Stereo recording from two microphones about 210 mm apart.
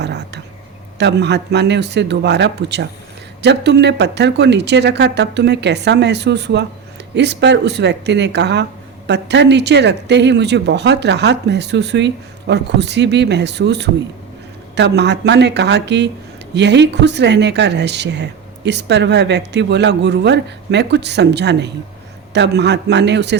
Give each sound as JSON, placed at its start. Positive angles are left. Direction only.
{"t": 0.0, "sound": "a woman's voice", "side_deg": -55}